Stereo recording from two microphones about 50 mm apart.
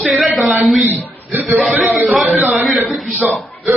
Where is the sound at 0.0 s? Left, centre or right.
Centre.